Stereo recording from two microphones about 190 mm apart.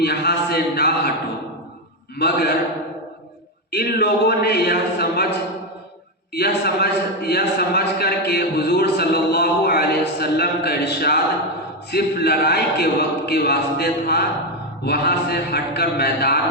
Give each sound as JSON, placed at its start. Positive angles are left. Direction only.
{"t": 0.0, "sound": "a sound", "side_deg": 60}
{"t": 2.1, "sound": "a man's voice", "side_deg": 60}
{"t": 3.7, "sound": "a man's voice", "side_deg": 55}
{"t": 6.3, "sound": "a man's voice", "side_deg": 55}